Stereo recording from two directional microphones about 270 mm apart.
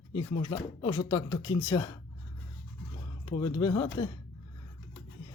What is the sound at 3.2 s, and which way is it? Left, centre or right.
Speech, centre.